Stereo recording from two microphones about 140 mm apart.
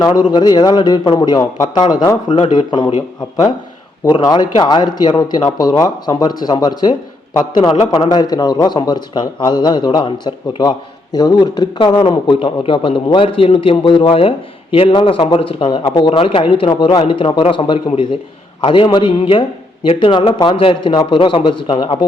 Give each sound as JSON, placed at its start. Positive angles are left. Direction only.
{"t": 0.0, "sound": "a man's voice", "side_deg": 30}
{"t": 4.0, "sound": "a man's voice", "side_deg": 30}